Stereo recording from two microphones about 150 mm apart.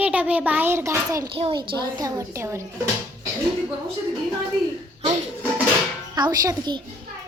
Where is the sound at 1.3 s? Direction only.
35° right (ahead or behind); by 2.6 s 20° right (ahead or behind).